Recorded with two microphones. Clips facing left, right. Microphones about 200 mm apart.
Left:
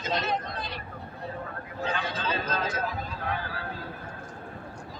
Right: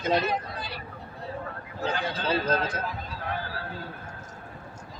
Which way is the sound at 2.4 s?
60° right (ahead or behind).